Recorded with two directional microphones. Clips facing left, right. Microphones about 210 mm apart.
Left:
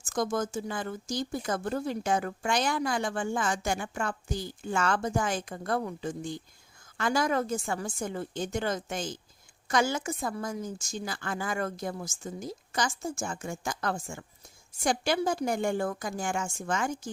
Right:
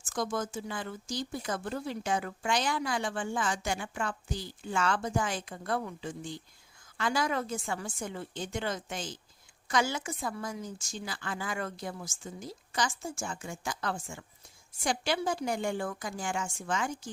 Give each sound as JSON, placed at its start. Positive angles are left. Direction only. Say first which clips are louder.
{"t": 0.0, "sound": "speech", "louder": "left 4 dB", "side_deg": 45}